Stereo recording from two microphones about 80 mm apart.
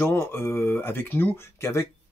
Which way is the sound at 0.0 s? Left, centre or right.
Left.